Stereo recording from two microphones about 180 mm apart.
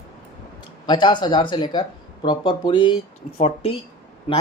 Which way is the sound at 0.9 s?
25° left (ahead or behind).